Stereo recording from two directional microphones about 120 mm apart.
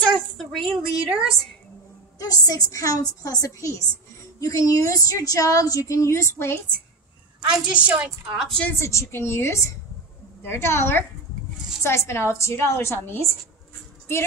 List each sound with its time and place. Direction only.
0.1 s a sound: centre (ahead or behind)
1.0 s a woman's voice: 5° right (ahead or behind)
2.1 s a woman's voice: 30° left (ahead or behind)
7.5 s a woman's voice: 10° right (ahead or behind)
8.5 s a woman's voice: 10° left (ahead or behind)
8.7 s a woman's voice: 25° left (ahead or behind)